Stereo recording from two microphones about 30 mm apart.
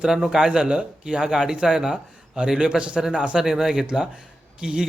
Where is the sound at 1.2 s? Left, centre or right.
Centre.